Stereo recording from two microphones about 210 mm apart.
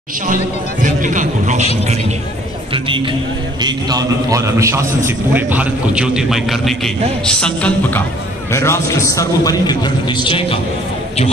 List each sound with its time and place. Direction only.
0.8 s speech: 40° right (ahead or behind)
2.7 s a man's voice: 25° right (ahead or behind); by 10.6 s 25° left (ahead or behind)